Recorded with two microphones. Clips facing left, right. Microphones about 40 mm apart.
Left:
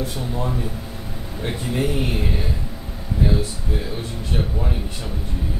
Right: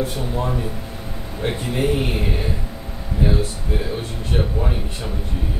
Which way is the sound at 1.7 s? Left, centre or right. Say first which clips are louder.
Right 1 dB; right.